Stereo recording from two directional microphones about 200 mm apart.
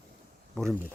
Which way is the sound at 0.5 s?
Centre (ahead or behind).